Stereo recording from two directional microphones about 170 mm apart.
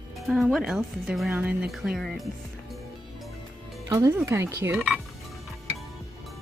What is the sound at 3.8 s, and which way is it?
Speech, 20° right (ahead or behind).